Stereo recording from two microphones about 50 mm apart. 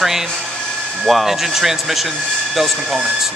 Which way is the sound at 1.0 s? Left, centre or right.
Centre.